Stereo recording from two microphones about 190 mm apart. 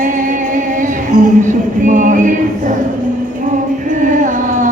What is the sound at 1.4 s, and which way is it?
Music, 40° right (ahead or behind).